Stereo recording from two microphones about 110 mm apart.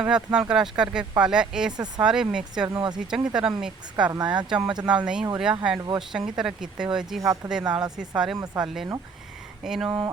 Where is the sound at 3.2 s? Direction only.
10° right (ahead or behind).